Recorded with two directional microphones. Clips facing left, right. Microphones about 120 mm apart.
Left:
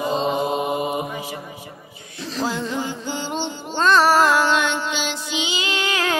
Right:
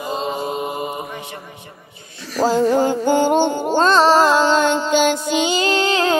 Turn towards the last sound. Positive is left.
turn(degrees=-25)  # may be behind; listen again after turning